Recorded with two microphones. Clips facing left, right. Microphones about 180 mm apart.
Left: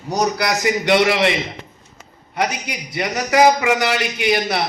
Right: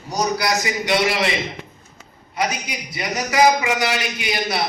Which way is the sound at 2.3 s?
60° left (ahead or behind).